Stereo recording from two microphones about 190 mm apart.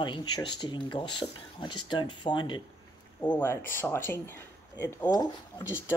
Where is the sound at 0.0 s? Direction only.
25° left (ahead or behind).